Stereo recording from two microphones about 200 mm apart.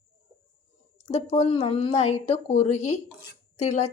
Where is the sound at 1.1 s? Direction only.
30° left (ahead or behind).